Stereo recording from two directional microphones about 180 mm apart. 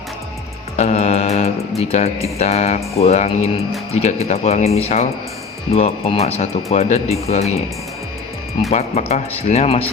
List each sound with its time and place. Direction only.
0.8 s mantra: 35° left (ahead or behind)
1.8 s speech: 35° left (ahead or behind)
8.7 s speech: 40° left (ahead or behind)